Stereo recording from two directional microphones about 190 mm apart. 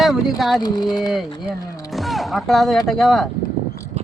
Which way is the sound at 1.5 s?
20° left (ahead or behind).